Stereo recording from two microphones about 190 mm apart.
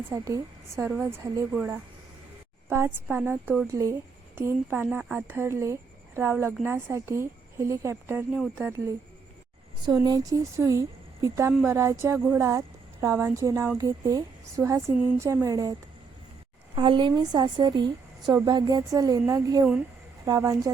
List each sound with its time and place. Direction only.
0.1 s speech: 15° right (ahead or behind)
9.8 s speech: 20° right (ahead or behind)
16.7 s a woman's voice: 25° right (ahead or behind)